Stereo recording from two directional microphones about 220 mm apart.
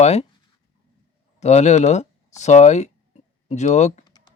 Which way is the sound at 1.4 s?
30° left (ahead or behind).